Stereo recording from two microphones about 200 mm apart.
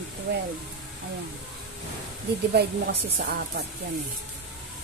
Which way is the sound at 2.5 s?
50° right (ahead or behind).